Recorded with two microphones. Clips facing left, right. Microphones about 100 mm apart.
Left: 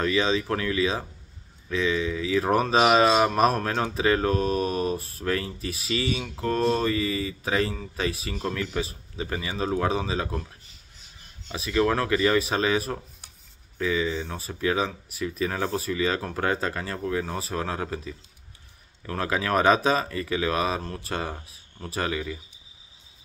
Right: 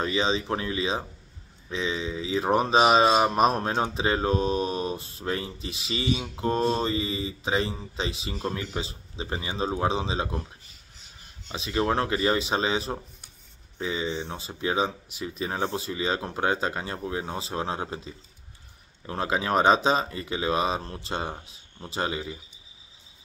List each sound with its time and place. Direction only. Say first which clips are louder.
0.0 s speech: left 2 dB; 25° right (ahead or behind)
11.5 s speech: left 2 dB; 25° right (ahead or behind)